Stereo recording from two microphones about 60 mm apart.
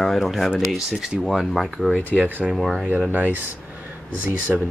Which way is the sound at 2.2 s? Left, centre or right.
Right.